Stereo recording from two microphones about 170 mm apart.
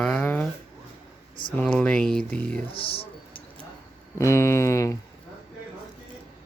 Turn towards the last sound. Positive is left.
turn(degrees=20)  # may be behind; listen again after turning